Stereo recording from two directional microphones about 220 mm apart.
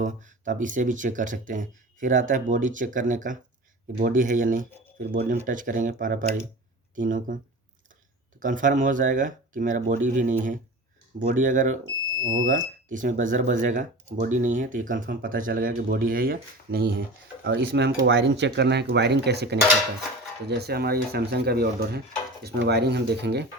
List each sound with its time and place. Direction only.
0.0 s speech: 35° right (ahead or behind)
8.4 s speech: 35° right (ahead or behind)
12.2 s speech: 65° right (ahead or behind)
12.5 s speech: 35° right (ahead or behind)